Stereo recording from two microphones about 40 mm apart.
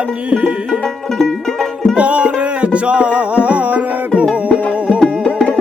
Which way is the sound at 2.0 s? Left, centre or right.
Right.